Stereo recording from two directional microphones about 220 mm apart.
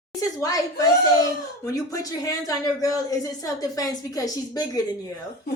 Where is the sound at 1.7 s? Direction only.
15° left (ahead or behind).